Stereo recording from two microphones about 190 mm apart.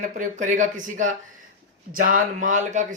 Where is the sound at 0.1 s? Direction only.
40° right (ahead or behind).